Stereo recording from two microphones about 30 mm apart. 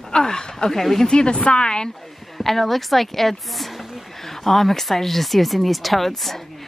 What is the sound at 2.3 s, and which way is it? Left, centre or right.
Speech, centre.